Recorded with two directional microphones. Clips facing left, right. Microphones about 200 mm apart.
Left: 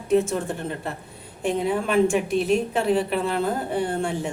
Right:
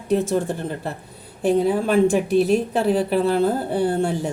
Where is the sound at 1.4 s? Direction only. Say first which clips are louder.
Right 5 dB; 35° right (ahead or behind).